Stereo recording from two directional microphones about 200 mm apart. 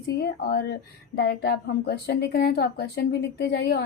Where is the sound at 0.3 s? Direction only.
50° left (ahead or behind).